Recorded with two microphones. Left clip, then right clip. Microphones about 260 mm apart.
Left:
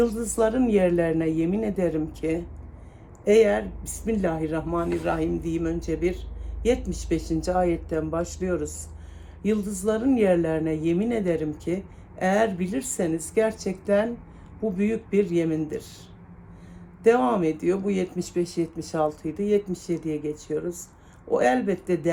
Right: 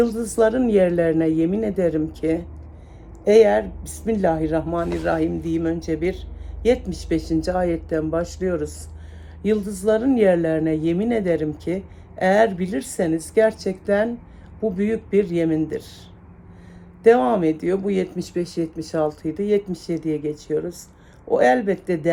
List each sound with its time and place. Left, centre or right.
0.0 s a woman's voice: centre
17.0 s speech: centre